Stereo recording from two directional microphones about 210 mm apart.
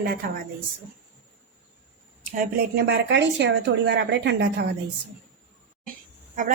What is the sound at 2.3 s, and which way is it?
Speech, 50° right (ahead or behind).